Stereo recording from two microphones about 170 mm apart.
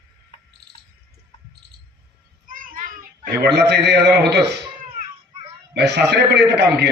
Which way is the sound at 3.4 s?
80° right.